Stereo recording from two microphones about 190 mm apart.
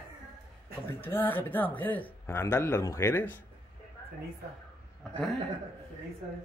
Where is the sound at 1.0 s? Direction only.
10° left (ahead or behind).